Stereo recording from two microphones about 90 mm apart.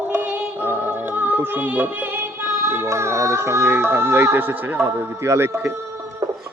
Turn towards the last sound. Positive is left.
turn(degrees=-30)  # may be behind; listen again after turning